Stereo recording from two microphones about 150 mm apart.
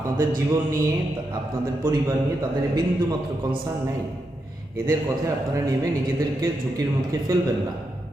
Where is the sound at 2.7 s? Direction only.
25° right (ahead or behind).